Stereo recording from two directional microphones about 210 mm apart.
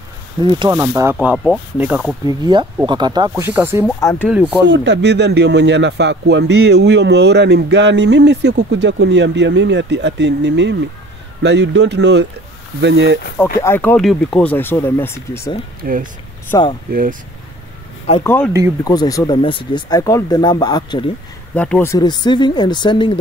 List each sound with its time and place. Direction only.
0.4 s speech: 20° right (ahead or behind); by 2.1 s 5° right (ahead or behind)
2.2 s speech: 20° right (ahead or behind)
4.6 s speech: 60° right (ahead or behind)
13.6 s speech: 10° left (ahead or behind)
15.8 s speech: 40° right (ahead or behind)
16.4 s speech: 20° left (ahead or behind)
16.9 s speech: 40° right (ahead or behind)
18.2 s speech: 10° left (ahead or behind)
21.5 s speech: 5° left (ahead or behind); by 23.1 s 20° left (ahead or behind)